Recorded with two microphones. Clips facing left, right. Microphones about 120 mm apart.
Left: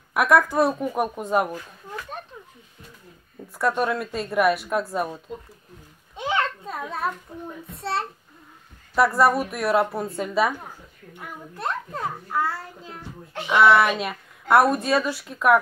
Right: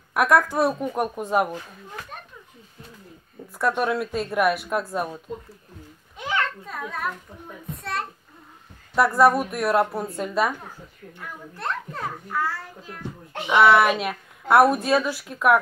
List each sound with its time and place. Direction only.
0.1 s a woman's voice: centre (ahead or behind)
3.5 s a woman's voice: centre (ahead or behind)
6.1 s a sound: 25° left (ahead or behind)
7.7 s a child's voice: 30° left (ahead or behind)
8.9 s a woman's voice: centre (ahead or behind)
11.1 s a child's voice: 15° left (ahead or behind)
13.6 s a woman's voice: centre (ahead or behind)